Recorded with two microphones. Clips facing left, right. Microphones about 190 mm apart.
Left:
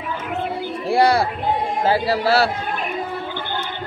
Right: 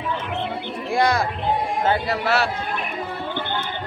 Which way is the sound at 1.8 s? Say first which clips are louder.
Left 3 dB; 30° left (ahead or behind).